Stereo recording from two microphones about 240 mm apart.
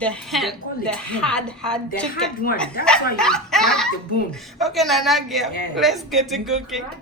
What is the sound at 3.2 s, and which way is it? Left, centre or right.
A woman's voice, centre.